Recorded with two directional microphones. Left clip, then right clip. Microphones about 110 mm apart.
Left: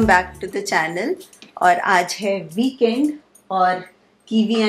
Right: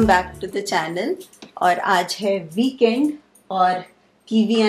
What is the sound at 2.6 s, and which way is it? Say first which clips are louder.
Speech: right 1 dB; 15° right (ahead or behind).